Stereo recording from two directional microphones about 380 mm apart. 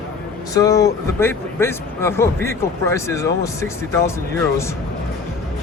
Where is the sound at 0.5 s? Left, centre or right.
Centre.